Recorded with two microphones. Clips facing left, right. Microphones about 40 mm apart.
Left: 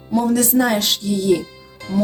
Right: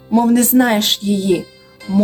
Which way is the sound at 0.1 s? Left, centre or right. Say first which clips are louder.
Right 5 dB; right.